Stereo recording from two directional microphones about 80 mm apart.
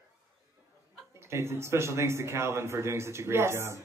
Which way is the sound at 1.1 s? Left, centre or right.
Right.